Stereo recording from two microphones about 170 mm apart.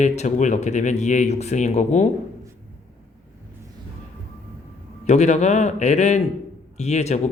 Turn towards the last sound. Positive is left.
turn(degrees=40)  # may be behind; listen again after turning